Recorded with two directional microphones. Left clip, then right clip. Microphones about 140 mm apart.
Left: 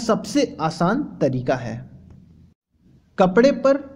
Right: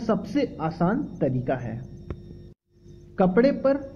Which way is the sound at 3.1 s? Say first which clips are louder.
Left 5 dB; 35° left (ahead or behind).